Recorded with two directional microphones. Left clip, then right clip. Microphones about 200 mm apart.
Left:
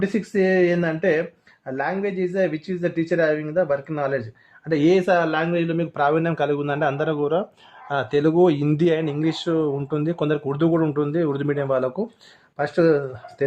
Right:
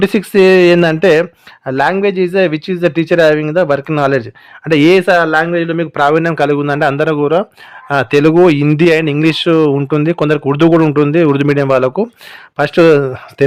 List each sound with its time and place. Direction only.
0.0 s speech: 55° right (ahead or behind)
2.0 s speech: 60° right (ahead or behind)
2.8 s a man's voice: 35° right (ahead or behind)
4.7 s a man's voice: 25° right (ahead or behind)